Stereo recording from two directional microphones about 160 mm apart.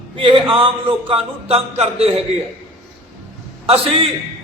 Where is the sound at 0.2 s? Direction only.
35° right (ahead or behind).